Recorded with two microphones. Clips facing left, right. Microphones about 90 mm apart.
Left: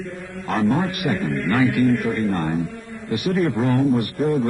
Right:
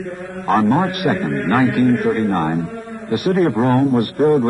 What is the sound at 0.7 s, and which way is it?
A man's voice, 55° right (ahead or behind).